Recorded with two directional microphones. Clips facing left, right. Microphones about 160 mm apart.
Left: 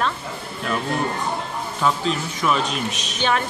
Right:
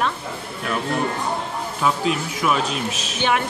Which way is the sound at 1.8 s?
10° right (ahead or behind).